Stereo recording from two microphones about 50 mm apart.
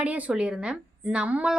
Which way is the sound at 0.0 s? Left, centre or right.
Right.